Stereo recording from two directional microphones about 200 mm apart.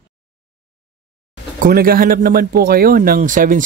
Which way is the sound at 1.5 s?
45° right (ahead or behind).